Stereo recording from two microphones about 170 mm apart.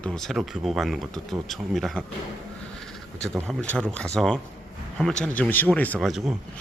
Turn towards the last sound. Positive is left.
turn(degrees=0)  # may be behind; listen again after turning